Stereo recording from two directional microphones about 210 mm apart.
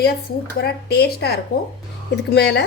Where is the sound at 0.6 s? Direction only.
50° left (ahead or behind).